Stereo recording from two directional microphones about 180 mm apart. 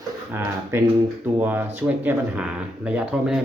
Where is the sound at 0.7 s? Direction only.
15° right (ahead or behind).